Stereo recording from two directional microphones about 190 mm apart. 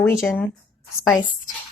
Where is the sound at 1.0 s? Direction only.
15° left (ahead or behind).